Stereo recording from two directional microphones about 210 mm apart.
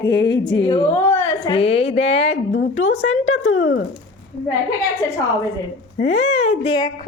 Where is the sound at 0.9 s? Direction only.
10° left (ahead or behind).